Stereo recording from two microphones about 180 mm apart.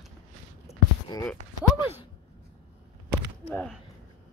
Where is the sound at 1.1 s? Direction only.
20° left (ahead or behind).